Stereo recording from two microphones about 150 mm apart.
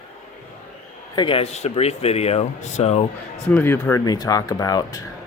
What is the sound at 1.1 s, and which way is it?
Speech, 35° left (ahead or behind).